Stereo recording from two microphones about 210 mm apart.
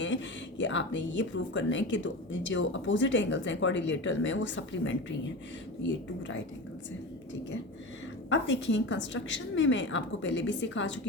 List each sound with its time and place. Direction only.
0.6 s speech: 60° left (ahead or behind)
8.3 s speech: 60° left (ahead or behind)